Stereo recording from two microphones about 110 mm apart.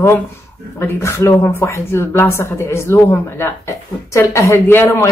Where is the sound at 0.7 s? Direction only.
25° left (ahead or behind).